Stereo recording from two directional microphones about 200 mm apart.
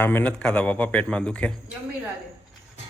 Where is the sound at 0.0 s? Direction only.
10° left (ahead or behind).